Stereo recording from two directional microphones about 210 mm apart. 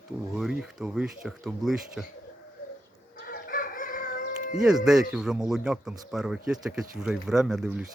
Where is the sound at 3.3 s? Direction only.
45° left (ahead or behind).